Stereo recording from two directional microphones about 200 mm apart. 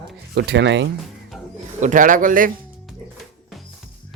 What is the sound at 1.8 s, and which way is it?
Speech, 40° right (ahead or behind).